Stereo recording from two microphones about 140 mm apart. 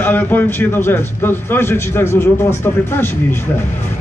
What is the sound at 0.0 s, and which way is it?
A man's voice, 15° left (ahead or behind).